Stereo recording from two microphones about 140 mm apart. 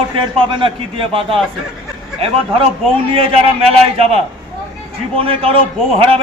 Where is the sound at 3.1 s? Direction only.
40° right (ahead or behind).